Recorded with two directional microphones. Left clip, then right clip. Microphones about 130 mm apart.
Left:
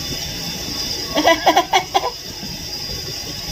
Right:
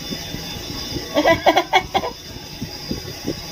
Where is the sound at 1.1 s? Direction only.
45° right (ahead or behind).